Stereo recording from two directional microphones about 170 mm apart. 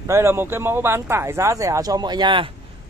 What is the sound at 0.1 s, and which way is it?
A man's voice, 15° right (ahead or behind).